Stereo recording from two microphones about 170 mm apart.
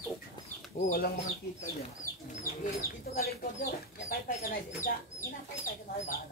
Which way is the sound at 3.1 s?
65° left (ahead or behind).